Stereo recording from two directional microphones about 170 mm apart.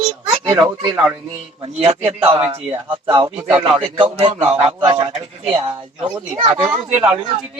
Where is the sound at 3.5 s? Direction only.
35° right (ahead or behind).